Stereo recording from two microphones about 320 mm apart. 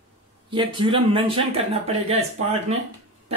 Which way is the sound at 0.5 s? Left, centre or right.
Centre.